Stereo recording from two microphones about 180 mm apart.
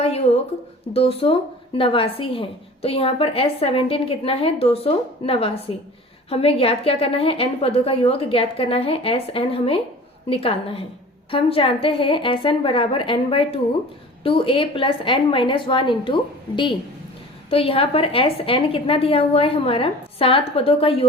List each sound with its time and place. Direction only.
0.9 s a woman's voice: 35° left (ahead or behind)
17.5 s a woman's voice: 30° left (ahead or behind)